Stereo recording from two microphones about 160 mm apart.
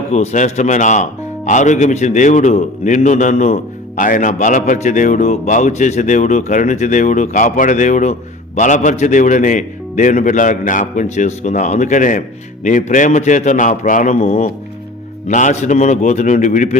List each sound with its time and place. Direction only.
0.1 s a man's voice: 45° left (ahead or behind)